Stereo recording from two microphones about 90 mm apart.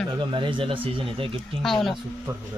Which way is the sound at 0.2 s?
65° right (ahead or behind).